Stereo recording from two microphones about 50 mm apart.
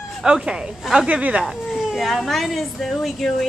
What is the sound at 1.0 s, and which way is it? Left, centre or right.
Speech, right.